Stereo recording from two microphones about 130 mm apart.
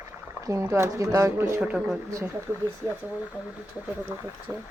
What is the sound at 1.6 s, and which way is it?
Speech, 10° right (ahead or behind).